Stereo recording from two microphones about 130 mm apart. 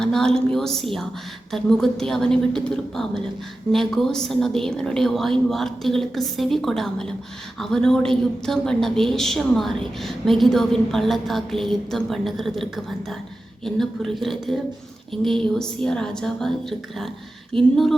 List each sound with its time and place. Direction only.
0.0 s a woman's voice: 5° left (ahead or behind)